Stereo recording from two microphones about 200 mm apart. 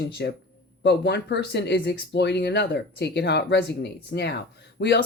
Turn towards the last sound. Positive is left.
turn(degrees=55)  # may be behind; listen again after turning